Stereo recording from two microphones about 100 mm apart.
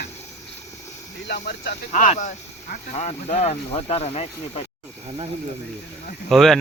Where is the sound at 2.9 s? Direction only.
90° left.